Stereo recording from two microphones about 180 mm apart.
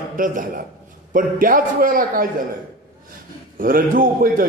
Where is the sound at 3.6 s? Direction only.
50° right (ahead or behind).